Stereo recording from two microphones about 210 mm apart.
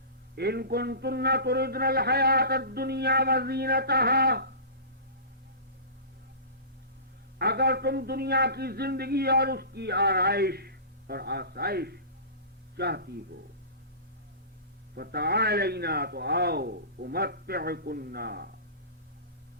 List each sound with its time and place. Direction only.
0.3 s a man's voice: 50° right (ahead or behind)
7.3 s a man's voice: 50° right (ahead or behind)
14.9 s a man's voice: 50° right (ahead or behind)